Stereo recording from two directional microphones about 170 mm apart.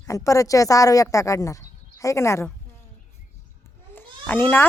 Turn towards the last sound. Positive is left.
turn(degrees=10)  # may be behind; listen again after turning